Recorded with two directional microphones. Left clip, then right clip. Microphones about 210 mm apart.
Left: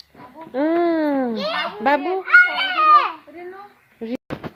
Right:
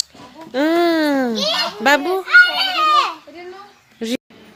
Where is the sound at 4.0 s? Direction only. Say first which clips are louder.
Right 5 dB; 15° right (ahead or behind).